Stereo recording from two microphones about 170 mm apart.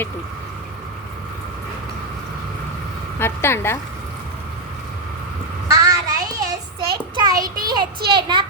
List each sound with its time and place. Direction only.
3.2 s a woman's voice: 15° left (ahead or behind)
5.6 s child singing: 20° right (ahead or behind)
6.7 s a child's voice: 25° right (ahead or behind)